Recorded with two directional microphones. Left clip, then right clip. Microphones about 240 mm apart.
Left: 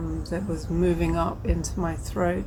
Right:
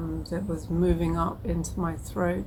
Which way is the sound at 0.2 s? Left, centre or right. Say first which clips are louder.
Left 2 dB; centre.